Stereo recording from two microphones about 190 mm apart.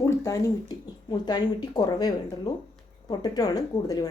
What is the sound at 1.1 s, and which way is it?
Speech, 25° left (ahead or behind).